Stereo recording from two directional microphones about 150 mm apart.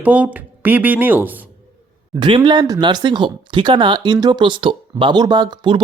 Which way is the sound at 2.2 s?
30° right (ahead or behind).